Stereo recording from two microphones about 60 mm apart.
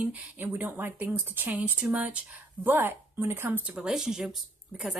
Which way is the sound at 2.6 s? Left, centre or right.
Right.